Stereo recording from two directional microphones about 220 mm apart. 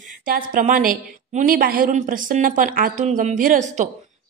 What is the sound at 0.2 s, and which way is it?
A woman's voice, 40° right (ahead or behind).